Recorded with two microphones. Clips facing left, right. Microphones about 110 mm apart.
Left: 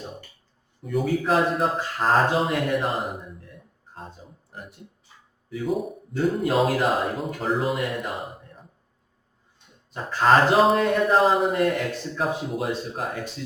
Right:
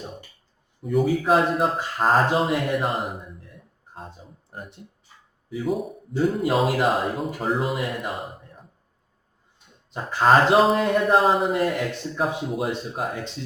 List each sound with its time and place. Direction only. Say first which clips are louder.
0.8 s speech: right 3 dB; centre (ahead or behind)
5.5 s speech: even; centre (ahead or behind)
9.9 s a man's voice: right 1 dB; 15° right (ahead or behind)
10.6 s speech: even; centre (ahead or behind)